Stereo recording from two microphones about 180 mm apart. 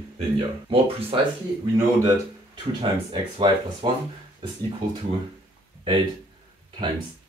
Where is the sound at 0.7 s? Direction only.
30° right (ahead or behind).